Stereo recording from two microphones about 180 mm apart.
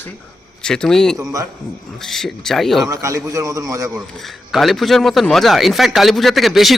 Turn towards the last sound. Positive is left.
turn(degrees=0)  # may be behind; listen again after turning